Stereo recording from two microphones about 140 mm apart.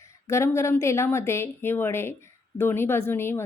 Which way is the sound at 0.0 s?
20° left (ahead or behind).